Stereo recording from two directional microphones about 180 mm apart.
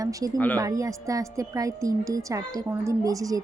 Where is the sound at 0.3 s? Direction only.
10° left (ahead or behind).